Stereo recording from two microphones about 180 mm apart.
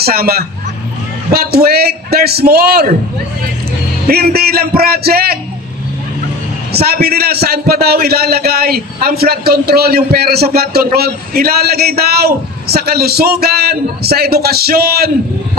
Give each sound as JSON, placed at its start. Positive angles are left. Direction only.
{"t": 0.0, "sound": "a man's voice", "side_deg": -60}
{"t": 4.1, "sound": "a man's voice", "side_deg": -60}
{"t": 6.7, "sound": "a man's voice", "side_deg": -60}